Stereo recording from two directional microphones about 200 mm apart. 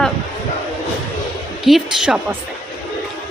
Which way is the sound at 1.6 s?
Centre (ahead or behind).